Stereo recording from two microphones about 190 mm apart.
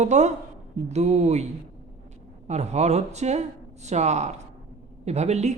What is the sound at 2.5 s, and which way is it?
Speech, 35° right (ahead or behind).